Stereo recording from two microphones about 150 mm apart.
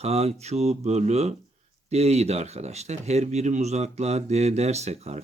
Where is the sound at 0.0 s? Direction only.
45° right (ahead or behind).